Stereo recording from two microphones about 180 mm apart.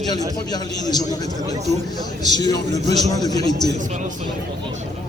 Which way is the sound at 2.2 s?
20° left (ahead or behind).